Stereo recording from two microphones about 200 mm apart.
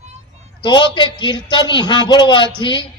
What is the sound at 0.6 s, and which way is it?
Speech, 20° left (ahead or behind).